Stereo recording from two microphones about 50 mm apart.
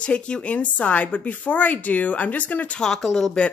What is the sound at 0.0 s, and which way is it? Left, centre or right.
A woman's voice, left.